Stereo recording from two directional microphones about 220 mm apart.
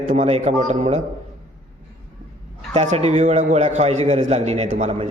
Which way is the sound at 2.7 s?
30° right (ahead or behind).